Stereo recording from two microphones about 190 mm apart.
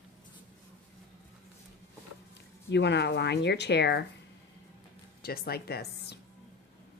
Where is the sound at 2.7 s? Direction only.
65° left (ahead or behind).